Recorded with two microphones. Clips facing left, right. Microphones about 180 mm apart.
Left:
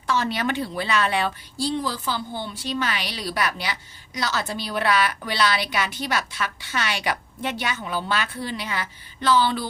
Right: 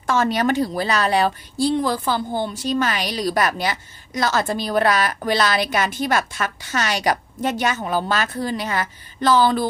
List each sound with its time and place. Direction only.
0.1 s a woman's voice: 45° right (ahead or behind)